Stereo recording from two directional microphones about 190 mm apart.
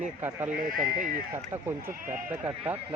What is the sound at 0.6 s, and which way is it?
Speech, 45° right (ahead or behind).